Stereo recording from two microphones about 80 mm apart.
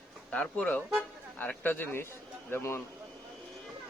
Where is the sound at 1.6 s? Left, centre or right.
Left.